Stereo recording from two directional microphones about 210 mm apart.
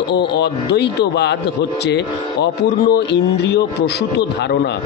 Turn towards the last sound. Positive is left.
turn(degrees=55)  # may be behind; listen again after turning